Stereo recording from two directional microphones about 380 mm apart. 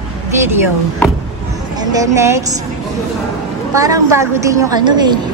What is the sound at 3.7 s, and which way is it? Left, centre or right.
A woman's voice, centre.